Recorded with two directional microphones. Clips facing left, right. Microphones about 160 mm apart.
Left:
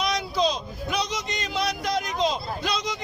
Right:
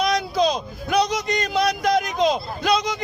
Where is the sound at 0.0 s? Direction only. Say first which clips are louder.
Right 4 dB; 40° right (ahead or behind).